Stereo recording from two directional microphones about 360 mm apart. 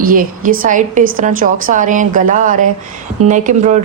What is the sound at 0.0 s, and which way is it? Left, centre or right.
Speech, right.